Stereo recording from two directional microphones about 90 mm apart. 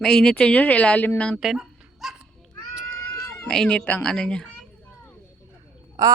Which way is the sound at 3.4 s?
10° left (ahead or behind).